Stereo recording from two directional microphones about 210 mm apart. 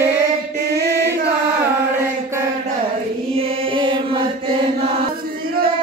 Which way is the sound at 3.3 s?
25° right (ahead or behind).